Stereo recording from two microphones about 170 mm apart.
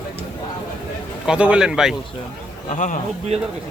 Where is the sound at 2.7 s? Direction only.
50° left (ahead or behind).